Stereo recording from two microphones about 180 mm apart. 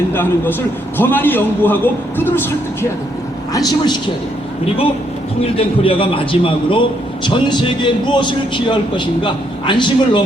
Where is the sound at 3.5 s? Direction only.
25° left (ahead or behind).